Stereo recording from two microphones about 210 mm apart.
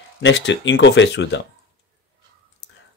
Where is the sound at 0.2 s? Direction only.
60° left (ahead or behind).